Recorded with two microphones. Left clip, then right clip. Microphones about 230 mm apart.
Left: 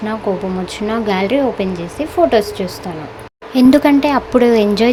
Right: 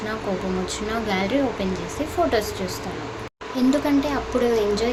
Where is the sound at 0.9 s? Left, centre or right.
Left.